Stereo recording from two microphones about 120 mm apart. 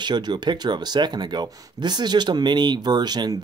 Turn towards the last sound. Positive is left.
turn(degrees=-35)  # may be behind; listen again after turning